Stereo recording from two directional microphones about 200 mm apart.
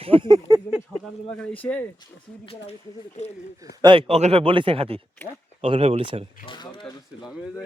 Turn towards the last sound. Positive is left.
turn(degrees=25)  # may be behind; listen again after turning